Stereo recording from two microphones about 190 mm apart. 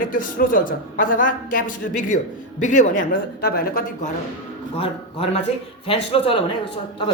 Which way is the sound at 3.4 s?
55° left (ahead or behind).